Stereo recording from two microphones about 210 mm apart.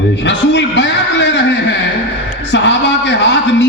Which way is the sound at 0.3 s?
55° left (ahead or behind).